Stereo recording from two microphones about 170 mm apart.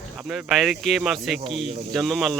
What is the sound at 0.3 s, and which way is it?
Speech, centre (ahead or behind).